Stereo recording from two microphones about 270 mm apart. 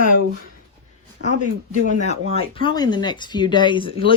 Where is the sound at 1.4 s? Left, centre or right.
Left.